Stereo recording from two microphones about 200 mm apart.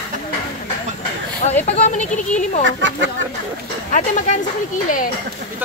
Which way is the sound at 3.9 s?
40° left (ahead or behind).